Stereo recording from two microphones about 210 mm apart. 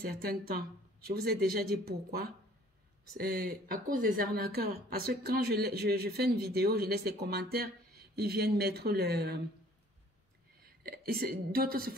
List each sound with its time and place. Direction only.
0.2 s speech: 45° right (ahead or behind)
10.6 s a woman's voice: 45° right (ahead or behind)